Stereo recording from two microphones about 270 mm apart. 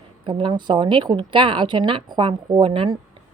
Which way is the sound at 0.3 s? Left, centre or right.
Centre.